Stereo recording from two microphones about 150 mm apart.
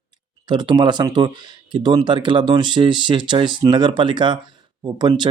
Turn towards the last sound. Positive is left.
turn(degrees=-30)  # may be behind; listen again after turning